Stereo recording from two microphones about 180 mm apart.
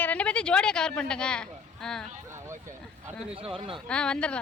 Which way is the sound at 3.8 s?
5° left (ahead or behind).